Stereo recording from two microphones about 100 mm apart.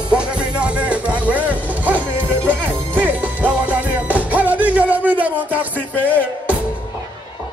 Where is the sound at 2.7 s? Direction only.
15° right (ahead or behind).